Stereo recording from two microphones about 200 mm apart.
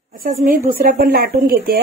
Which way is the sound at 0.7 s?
45° right (ahead or behind).